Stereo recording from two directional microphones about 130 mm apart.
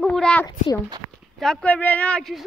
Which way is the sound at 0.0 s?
5° left (ahead or behind).